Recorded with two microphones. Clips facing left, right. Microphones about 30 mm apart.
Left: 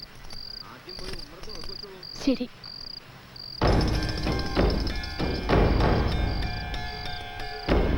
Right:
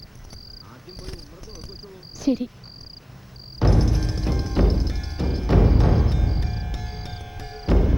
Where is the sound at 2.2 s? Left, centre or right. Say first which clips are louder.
Right 3 dB; left.